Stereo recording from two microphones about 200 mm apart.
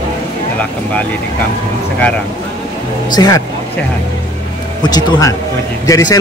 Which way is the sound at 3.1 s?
20° left (ahead or behind).